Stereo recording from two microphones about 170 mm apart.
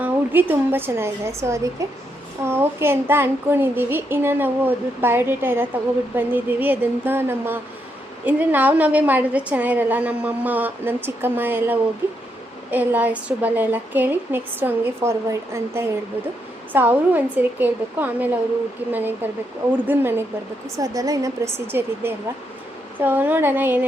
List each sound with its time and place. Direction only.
0.0 s a woman's voice: 10° right (ahead or behind)